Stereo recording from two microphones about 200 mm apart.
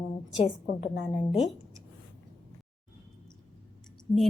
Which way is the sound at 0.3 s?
40° left (ahead or behind).